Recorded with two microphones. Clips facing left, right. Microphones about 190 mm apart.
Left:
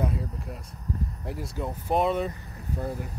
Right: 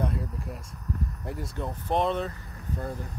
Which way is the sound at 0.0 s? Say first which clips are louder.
Left 1 dB; centre (ahead or behind).